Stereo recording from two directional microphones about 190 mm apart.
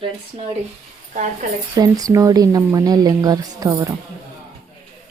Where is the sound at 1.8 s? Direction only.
20° right (ahead or behind).